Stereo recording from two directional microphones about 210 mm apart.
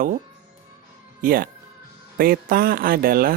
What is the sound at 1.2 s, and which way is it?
Speech, 45° right (ahead or behind).